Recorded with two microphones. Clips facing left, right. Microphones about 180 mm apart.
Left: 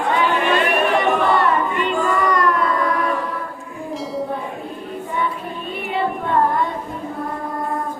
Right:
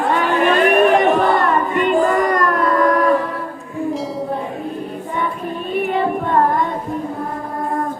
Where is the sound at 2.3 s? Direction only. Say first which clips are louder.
Right 2 dB; 50° right (ahead or behind).